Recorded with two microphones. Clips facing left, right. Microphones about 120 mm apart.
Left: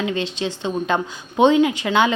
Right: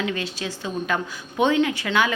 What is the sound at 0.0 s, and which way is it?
A woman's voice, 25° left (ahead or behind).